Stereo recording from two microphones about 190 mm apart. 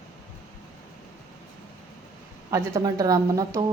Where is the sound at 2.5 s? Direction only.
15° right (ahead or behind).